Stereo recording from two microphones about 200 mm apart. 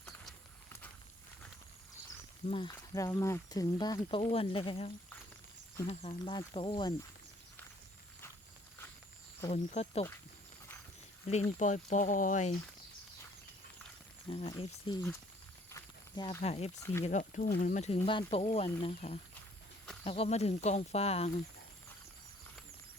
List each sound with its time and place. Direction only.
2.5 s speech: 25° left (ahead or behind)
5.9 s speech: 30° left (ahead or behind)
9.5 s speech: 35° left (ahead or behind)
11.6 s speech: 35° left (ahead or behind)
14.3 s speech: 25° left (ahead or behind)
15.7 s snake: 15° left (ahead or behind)
16.4 s speech: 30° left (ahead or behind)